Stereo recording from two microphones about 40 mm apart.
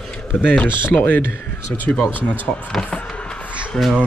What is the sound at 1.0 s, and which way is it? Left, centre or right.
Speech, left.